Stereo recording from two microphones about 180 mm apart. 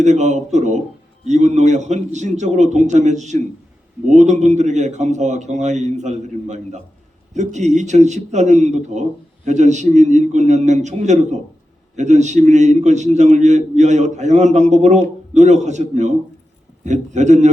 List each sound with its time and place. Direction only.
0.0 s a man's voice: 40° right (ahead or behind)